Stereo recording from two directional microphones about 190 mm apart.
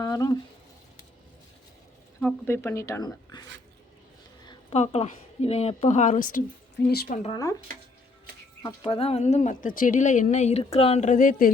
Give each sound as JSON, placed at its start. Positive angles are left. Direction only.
{"t": 0.0, "sound": "a sound", "side_deg": 20}
{"t": 2.2, "sound": "speech", "side_deg": 10}
{"t": 4.7, "sound": "speech", "side_deg": 35}
{"t": 8.6, "sound": "speech", "side_deg": 30}